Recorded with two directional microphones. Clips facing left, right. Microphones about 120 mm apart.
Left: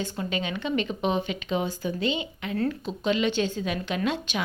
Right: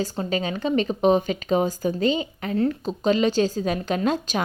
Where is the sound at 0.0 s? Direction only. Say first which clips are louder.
Right 5 dB; 35° right (ahead or behind).